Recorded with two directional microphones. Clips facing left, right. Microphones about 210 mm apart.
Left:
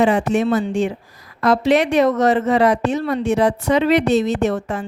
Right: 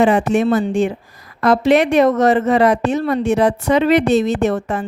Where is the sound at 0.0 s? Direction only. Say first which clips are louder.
Right 2 dB; 55° right (ahead or behind).